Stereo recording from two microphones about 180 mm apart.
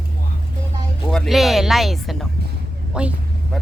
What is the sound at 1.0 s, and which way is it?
Speech, centre (ahead or behind).